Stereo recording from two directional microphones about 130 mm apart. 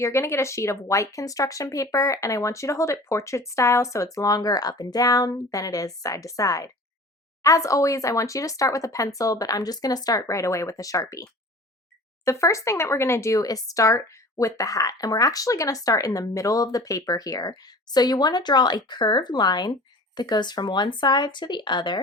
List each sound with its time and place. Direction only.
0.0 s speech: 20° left (ahead or behind)
12.2 s speech: 25° left (ahead or behind)